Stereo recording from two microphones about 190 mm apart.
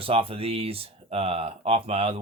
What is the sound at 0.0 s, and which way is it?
Speech, 30° right (ahead or behind).